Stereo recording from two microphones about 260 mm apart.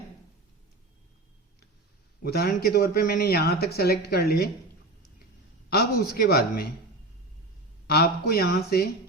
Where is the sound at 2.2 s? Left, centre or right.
Left.